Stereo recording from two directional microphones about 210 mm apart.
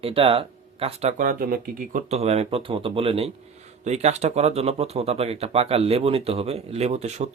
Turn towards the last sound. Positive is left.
turn(degrees=-30)  # may be behind; listen again after turning